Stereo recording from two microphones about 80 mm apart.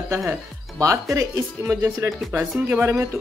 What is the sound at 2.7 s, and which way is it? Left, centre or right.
Speech, right.